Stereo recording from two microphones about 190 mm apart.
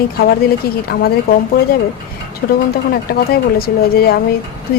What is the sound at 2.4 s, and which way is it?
A woman's voice, 60° left (ahead or behind).